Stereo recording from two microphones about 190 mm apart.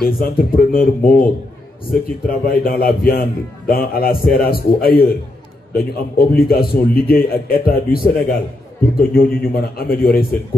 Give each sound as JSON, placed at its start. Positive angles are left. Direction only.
{"t": 0.2, "sound": "a man's voice", "side_deg": 50}